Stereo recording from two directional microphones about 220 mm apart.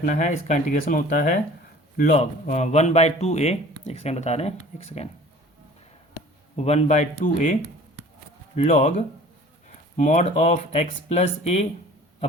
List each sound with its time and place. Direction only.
0.0 s a man's voice: 35° left (ahead or behind)
6.1 s speech: 30° left (ahead or behind)
8.5 s a man's voice: 30° left (ahead or behind)